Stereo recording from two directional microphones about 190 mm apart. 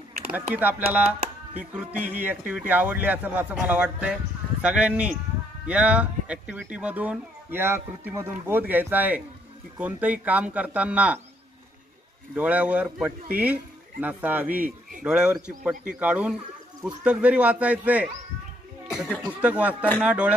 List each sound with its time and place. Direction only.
0.3 s speech: 10° right (ahead or behind)
12.4 s speech: 5° right (ahead or behind)
18.9 s a sound: centre (ahead or behind)
19.4 s speech: 5° right (ahead or behind)